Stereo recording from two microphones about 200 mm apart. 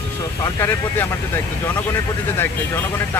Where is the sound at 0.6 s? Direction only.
10° left (ahead or behind).